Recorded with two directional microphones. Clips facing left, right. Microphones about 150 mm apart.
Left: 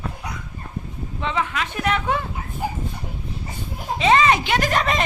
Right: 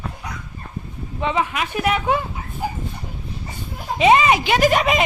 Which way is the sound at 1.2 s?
15° right (ahead or behind).